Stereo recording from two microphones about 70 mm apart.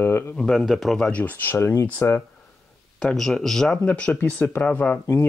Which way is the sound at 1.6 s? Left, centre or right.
Left.